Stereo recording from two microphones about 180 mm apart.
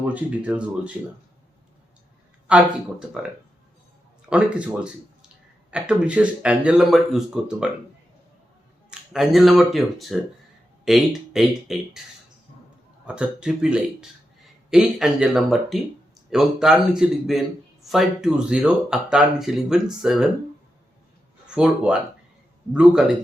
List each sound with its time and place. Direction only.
0.1 s speech: 5° right (ahead or behind)
2.5 s speech: 5° right (ahead or behind)
4.3 s speech: 5° right (ahead or behind)
9.1 s speech: centre (ahead or behind)
13.1 s speech: 5° right (ahead or behind)
21.4 s speech: 5° right (ahead or behind)